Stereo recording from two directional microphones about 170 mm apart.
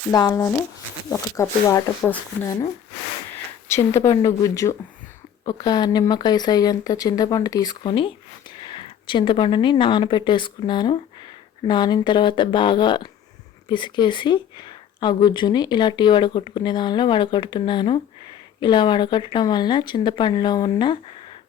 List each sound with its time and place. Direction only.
0.1 s speech: 20° left (ahead or behind)
3.7 s speech: 15° left (ahead or behind)